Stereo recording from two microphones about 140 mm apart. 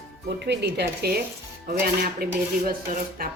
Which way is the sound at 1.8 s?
90° right.